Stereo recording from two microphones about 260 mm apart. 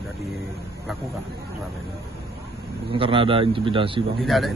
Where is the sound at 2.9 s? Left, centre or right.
Centre.